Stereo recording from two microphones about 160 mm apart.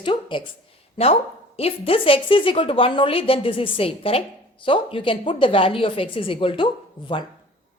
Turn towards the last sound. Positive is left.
turn(degrees=30)  # may be behind; listen again after turning